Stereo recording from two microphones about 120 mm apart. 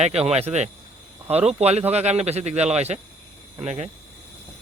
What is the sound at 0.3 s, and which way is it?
Speech, 60° right (ahead or behind).